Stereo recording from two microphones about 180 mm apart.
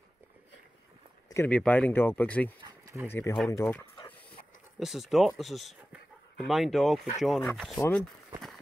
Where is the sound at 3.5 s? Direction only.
15° left (ahead or behind).